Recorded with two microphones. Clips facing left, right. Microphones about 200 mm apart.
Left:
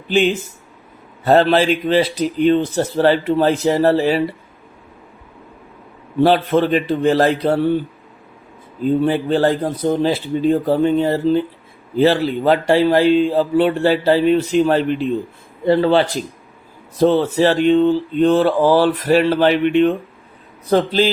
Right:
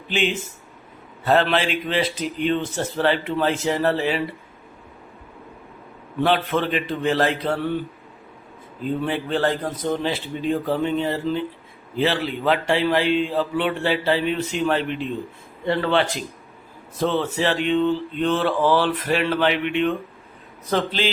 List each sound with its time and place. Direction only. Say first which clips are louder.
0.1 s speech: left 7 dB; 40° left (ahead or behind)
6.2 s speech: left 7 dB; 35° left (ahead or behind)
8.8 s speech: left 8 dB; 35° left (ahead or behind)